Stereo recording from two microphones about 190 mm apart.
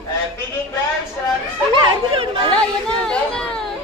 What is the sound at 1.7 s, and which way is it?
Chatter, 25° right (ahead or behind).